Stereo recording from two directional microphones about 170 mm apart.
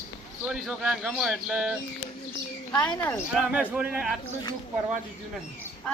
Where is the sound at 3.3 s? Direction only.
10° right (ahead or behind).